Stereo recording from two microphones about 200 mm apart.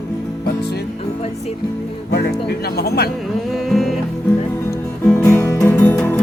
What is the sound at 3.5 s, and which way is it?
Music, centre (ahead or behind).